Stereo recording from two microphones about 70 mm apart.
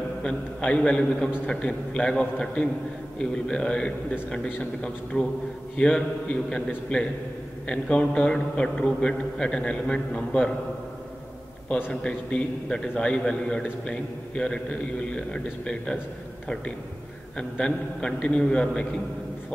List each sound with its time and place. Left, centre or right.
0.2 s a man's voice: centre
5.1 s a man's voice: left
5.8 s a man's voice: centre
11.9 s a man's voice: centre
17.4 s a man's voice: centre